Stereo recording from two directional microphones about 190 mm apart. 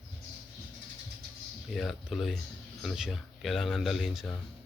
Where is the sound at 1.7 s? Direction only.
Centre (ahead or behind).